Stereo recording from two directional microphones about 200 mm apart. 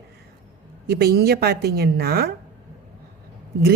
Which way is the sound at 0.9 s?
50° right (ahead or behind).